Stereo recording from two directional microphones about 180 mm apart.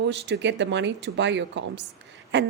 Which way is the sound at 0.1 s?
75° right (ahead or behind).